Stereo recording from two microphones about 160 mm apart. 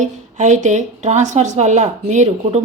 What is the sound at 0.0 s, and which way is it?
Speech, 50° right (ahead or behind).